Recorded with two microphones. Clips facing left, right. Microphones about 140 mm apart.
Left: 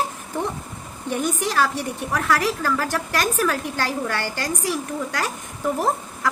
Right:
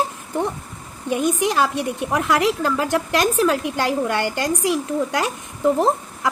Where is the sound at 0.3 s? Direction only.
15° right (ahead or behind).